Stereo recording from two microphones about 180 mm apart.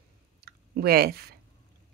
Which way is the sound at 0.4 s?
60° right (ahead or behind).